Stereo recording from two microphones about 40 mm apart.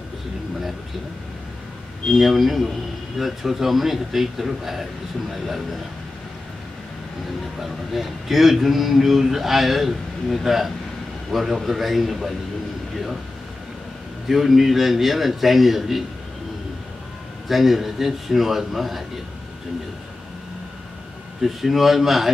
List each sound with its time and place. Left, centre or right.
2.1 s a man's voice: centre
7.5 s a man's voice: centre
14.2 s a man's voice: centre
17.5 s a man's voice: centre
21.4 s a man's voice: centre